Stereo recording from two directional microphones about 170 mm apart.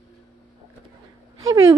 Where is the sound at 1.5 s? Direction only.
20° right (ahead or behind).